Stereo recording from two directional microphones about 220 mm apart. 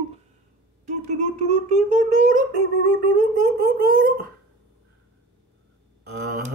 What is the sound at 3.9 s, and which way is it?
Dog, 40° right (ahead or behind).